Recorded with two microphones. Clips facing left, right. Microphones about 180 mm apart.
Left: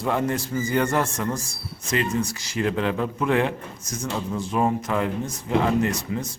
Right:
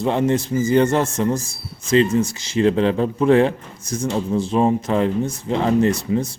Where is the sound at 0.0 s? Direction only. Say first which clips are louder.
Right 6 dB; 25° right (ahead or behind).